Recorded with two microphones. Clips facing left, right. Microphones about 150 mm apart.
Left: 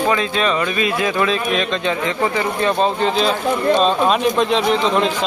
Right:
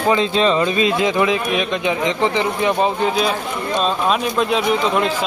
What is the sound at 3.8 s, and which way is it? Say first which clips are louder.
Speech: left 3 dB; centre (ahead or behind).